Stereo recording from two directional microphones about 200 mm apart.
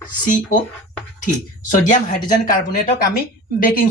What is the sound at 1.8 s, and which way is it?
Speech, 40° left (ahead or behind).